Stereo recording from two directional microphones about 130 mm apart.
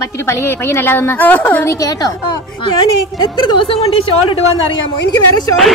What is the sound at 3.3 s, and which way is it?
A woman's voice, 40° left (ahead or behind).